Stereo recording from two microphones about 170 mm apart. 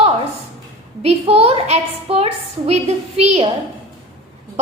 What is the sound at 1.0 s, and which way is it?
A woman's voice, 35° right (ahead or behind).